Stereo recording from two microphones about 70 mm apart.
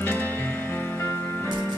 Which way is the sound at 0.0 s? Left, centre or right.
Left.